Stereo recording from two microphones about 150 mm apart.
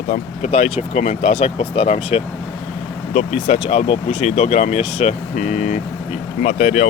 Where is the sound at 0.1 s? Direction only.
50° left (ahead or behind).